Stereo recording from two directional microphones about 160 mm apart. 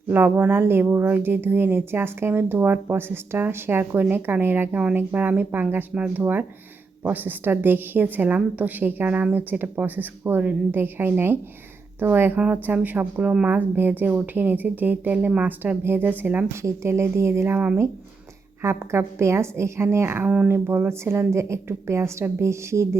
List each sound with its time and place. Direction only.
0.1 s speech: 10° right (ahead or behind)